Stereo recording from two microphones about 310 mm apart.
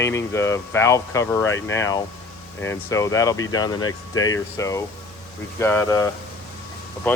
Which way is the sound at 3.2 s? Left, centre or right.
Centre.